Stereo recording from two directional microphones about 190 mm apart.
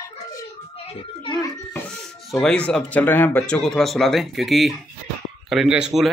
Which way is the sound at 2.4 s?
5° left (ahead or behind).